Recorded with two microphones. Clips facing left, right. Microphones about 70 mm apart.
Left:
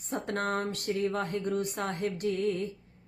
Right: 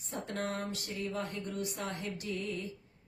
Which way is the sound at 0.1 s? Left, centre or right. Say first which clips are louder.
Left 6 dB; left.